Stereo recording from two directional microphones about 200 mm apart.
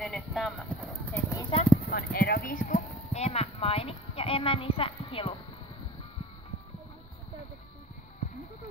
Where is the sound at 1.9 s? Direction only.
50° left (ahead or behind); by 5.4 s 25° left (ahead or behind).